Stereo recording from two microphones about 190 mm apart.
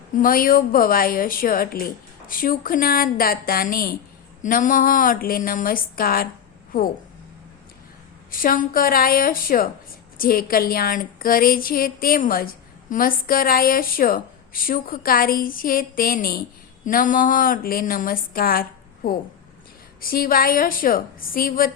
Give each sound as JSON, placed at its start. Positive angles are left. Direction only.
{"t": 0.2, "sound": "a woman's voice", "side_deg": 50}
{"t": 8.3, "sound": "a woman's voice", "side_deg": 45}